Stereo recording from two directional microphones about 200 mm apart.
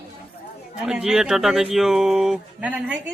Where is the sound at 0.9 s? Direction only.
5° right (ahead or behind).